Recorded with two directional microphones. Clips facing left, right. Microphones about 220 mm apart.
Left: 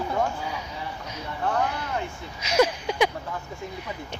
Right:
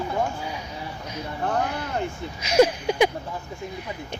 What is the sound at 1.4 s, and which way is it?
Speech, 50° right (ahead or behind).